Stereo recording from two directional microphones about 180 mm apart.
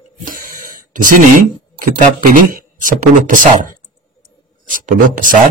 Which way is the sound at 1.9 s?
45° right (ahead or behind).